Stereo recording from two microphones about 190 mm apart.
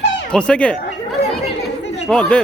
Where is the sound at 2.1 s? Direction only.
5° left (ahead or behind).